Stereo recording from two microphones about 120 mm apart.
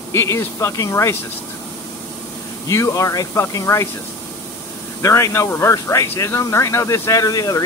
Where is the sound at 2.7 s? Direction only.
25° left (ahead or behind).